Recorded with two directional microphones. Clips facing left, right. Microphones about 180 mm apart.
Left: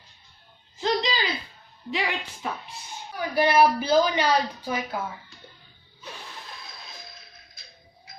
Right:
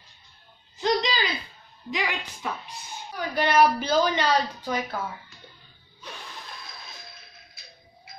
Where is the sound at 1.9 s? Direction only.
30° left (ahead or behind).